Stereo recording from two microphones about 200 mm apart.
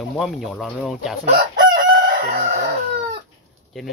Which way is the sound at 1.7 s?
40° right (ahead or behind).